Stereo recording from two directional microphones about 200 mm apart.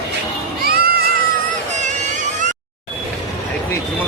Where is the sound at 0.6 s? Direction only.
50° right (ahead or behind).